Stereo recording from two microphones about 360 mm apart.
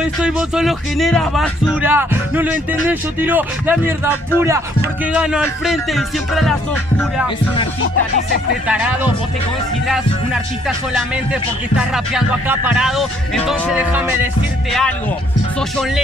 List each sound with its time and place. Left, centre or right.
0.2 s speech: centre
7.8 s speech: left
8.6 s speech: centre
11.7 s speech: centre